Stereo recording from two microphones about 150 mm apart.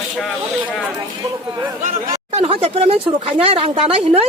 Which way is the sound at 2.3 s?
40° right (ahead or behind).